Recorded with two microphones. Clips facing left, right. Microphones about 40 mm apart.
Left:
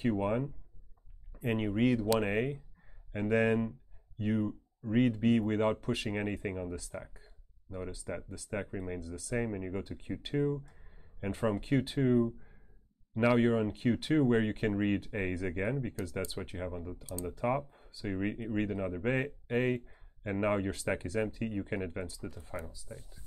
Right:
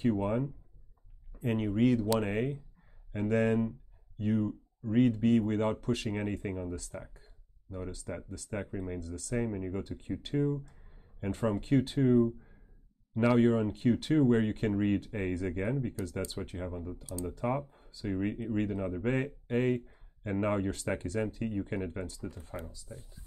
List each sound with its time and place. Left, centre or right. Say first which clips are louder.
0.0 s speech: right 1 dB; centre
17.0 s speech: right 2 dB; left
17.3 s speech: left 1 dB; centre